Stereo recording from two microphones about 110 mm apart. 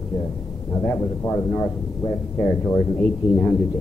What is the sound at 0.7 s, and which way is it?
A man's voice, 20° left (ahead or behind).